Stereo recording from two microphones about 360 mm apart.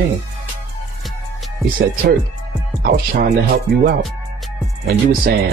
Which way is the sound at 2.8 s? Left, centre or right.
Right.